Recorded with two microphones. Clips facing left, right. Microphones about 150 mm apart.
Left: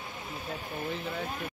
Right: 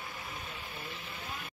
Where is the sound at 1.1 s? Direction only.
60° left (ahead or behind).